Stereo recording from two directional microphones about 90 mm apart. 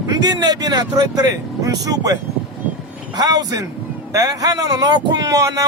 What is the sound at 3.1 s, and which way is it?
Speech, 45° right (ahead or behind).